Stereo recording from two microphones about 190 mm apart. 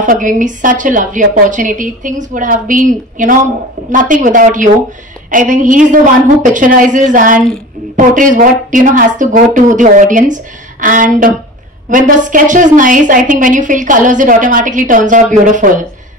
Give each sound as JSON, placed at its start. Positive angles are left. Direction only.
{"t": 0.0, "sound": "a woman's voice", "side_deg": -45}